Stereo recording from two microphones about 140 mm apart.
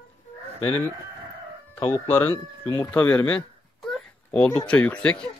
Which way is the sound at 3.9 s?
10° left (ahead or behind).